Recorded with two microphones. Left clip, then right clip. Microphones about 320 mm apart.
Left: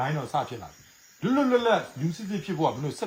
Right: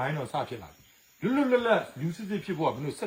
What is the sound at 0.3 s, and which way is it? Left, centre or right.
Speech, centre.